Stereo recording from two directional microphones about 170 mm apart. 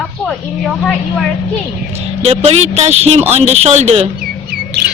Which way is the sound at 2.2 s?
40° right (ahead or behind).